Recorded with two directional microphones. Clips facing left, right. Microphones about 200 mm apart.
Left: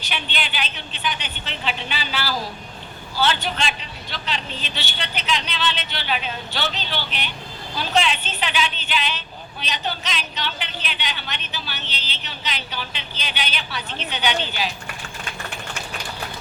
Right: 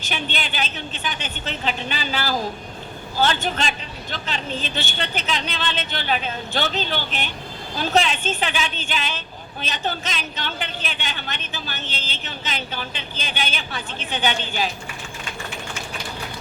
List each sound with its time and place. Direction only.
0.0 s a woman's voice: 45° right (ahead or behind)